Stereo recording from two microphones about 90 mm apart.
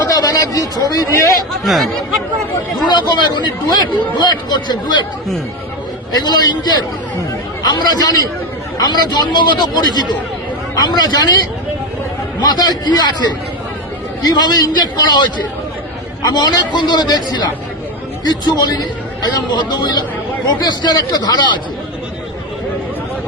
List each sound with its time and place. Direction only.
0.1 s a man's voice: 45° left (ahead or behind)
1.6 s speech: centre (ahead or behind)
2.8 s a man's voice: 55° left (ahead or behind)
6.1 s a man's voice: 50° left (ahead or behind)